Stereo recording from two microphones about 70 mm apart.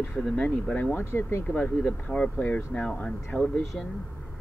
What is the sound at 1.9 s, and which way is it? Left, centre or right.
Speech, centre.